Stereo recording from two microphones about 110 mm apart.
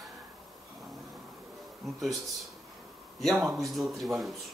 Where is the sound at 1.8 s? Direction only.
Centre (ahead or behind).